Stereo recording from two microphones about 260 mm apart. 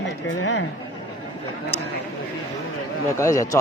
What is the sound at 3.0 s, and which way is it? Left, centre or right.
Speech, centre.